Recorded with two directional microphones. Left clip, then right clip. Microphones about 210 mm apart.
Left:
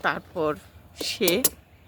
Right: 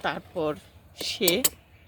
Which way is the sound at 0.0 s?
5° right (ahead or behind).